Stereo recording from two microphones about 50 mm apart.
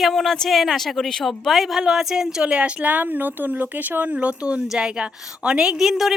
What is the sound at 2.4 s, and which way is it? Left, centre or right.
A woman's voice, right.